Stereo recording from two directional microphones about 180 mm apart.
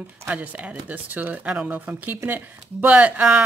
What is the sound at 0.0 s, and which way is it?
Speech, 10° right (ahead or behind).